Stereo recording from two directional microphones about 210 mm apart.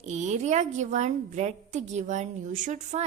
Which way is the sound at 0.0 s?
35° right (ahead or behind).